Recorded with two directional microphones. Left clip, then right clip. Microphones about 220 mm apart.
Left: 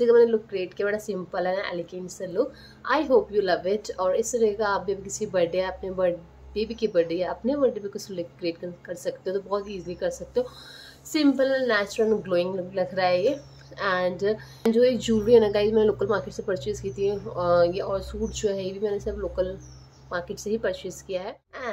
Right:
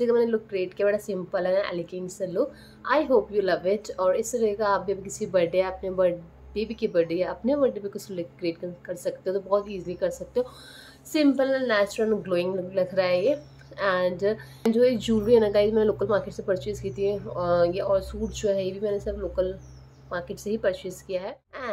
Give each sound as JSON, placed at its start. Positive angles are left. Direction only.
{"t": 0.0, "sound": "speech", "side_deg": 0}